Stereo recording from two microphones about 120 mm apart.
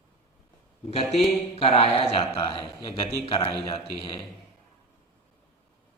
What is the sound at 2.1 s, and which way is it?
A man's voice, 45° left (ahead or behind).